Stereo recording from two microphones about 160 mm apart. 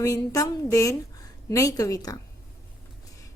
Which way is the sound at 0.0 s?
20° left (ahead or behind).